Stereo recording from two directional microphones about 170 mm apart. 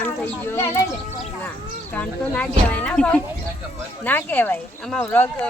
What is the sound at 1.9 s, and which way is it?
Speech, 10° left (ahead or behind).